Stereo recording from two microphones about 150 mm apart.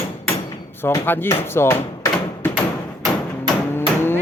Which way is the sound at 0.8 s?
15° left (ahead or behind).